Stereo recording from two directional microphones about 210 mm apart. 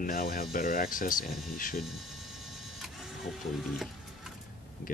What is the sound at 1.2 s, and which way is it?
Speech, centre (ahead or behind).